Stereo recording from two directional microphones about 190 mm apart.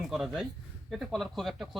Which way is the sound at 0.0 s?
Centre (ahead or behind).